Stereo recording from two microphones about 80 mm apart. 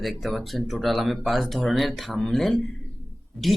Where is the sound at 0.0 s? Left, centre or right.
Centre.